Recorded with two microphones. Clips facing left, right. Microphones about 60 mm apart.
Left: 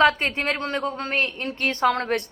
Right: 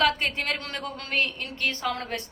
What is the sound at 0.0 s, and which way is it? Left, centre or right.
A woman's voice, left.